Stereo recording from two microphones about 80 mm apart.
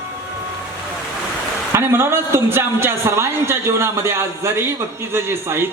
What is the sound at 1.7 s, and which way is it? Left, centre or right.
A man's voice, right.